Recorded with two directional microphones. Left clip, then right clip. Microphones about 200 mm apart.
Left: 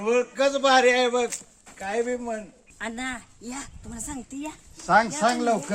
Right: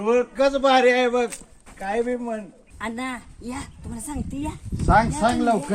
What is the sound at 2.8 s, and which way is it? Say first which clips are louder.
A woman's voice: right 2 dB; 20° left (ahead or behind).